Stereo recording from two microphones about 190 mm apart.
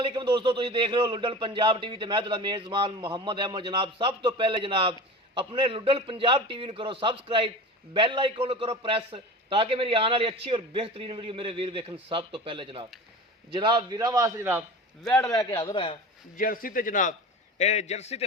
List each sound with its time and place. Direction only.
0.0 s speech: 25° right (ahead or behind)
15.0 s a man's voice: 10° left (ahead or behind)
15.4 s a man's voice: 25° left (ahead or behind)
16.4 s a man's voice: 50° left (ahead or behind)